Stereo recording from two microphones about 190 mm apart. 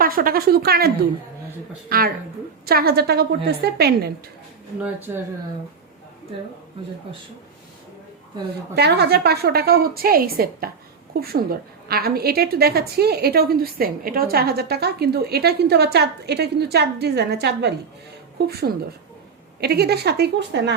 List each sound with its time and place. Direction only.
0.0 s a woman's voice: 50° right (ahead or behind)
4.8 s speech: 10° right (ahead or behind)
8.7 s a woman's voice: 60° right (ahead or behind)
19.5 s a woman's voice: 55° right (ahead or behind)